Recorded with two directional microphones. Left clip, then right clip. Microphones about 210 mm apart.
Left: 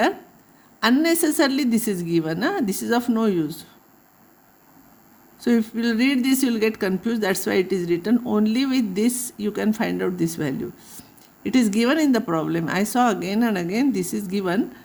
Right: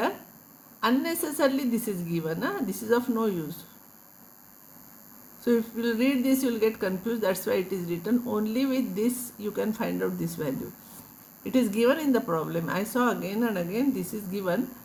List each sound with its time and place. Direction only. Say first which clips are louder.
0.8 s speech: left 7 dB; 50° left (ahead or behind)
5.4 s speech: left 3 dB; 50° left (ahead or behind)